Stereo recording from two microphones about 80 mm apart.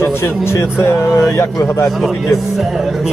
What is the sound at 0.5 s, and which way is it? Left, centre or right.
Speech, left.